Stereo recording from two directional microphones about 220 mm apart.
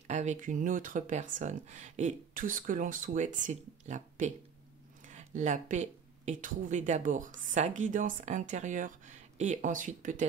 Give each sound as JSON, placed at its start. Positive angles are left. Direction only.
{"t": 0.0, "sound": "speech", "side_deg": -30}